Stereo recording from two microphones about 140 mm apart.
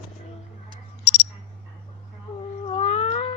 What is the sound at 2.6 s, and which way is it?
Cat, 45° left (ahead or behind).